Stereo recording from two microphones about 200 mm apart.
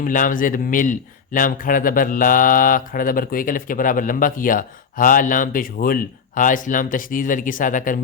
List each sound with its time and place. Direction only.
0.0 s speech: 40° left (ahead or behind)